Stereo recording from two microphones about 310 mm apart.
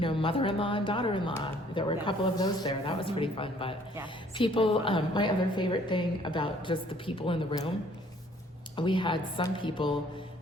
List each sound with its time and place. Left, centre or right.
0.0 s a woman's voice: centre
8.7 s a woman's voice: centre